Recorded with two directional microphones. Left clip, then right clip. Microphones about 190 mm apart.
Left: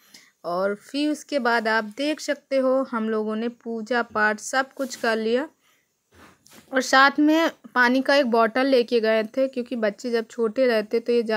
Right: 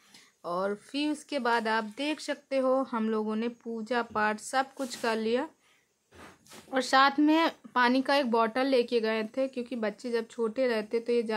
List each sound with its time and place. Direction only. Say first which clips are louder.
0.1 s speech: left 6 dB; 20° left (ahead or behind)
6.7 s speech: left 6 dB; 20° left (ahead or behind)